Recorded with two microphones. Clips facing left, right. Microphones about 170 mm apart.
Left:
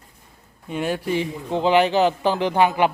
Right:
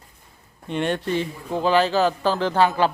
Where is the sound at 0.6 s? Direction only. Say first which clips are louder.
Even; 5° left (ahead or behind).